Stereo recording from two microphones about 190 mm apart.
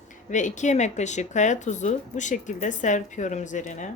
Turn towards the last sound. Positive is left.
turn(degrees=40)  # may be behind; listen again after turning